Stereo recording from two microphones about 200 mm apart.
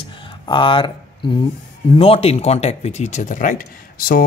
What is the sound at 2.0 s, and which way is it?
Speech, 30° left (ahead or behind).